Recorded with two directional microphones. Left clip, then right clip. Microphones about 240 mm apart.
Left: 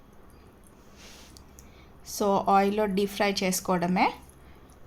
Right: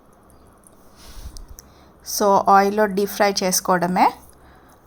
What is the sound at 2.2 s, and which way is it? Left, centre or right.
Speech, centre.